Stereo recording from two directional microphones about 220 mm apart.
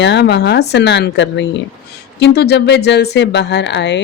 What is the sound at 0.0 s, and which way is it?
Speech, 50° left (ahead or behind).